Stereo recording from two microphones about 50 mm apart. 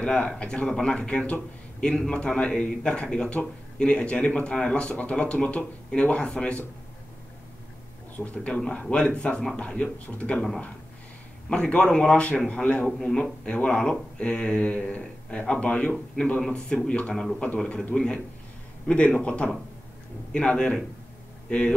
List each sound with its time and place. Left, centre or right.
0.2 s a man's voice: centre
8.2 s a man's voice: left
8.5 s a man's voice: centre
11.5 s a man's voice: centre
12.8 s speech: centre
13.2 s a man's voice: left
16.3 s speech: centre
17.0 s speech: centre
18.9 s a man's voice: left